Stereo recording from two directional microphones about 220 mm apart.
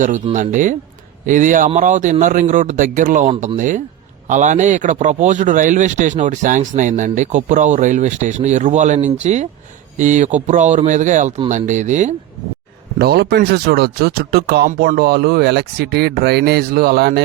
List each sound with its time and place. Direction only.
0.0 s speech: 35° right (ahead or behind)
13.0 s speech: 45° right (ahead or behind)